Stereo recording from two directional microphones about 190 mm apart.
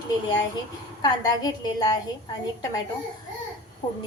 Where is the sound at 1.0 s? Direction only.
20° left (ahead or behind).